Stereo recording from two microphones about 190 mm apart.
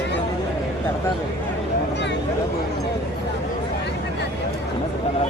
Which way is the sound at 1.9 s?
65° left (ahead or behind).